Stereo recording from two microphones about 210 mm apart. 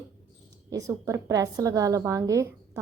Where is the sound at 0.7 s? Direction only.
15° right (ahead or behind).